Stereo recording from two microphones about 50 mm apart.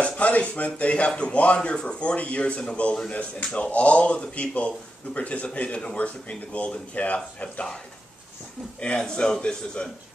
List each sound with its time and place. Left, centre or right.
0.0 s speech: left
5.9 s speech: left
8.7 s speech: left